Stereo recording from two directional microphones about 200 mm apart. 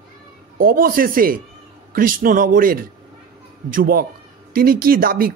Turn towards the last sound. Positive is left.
turn(degrees=-45)  # may be behind; listen again after turning